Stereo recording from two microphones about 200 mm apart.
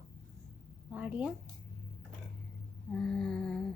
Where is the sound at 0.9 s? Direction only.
5° right (ahead or behind).